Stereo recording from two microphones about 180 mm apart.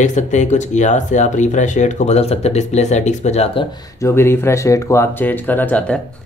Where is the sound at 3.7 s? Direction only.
15° left (ahead or behind).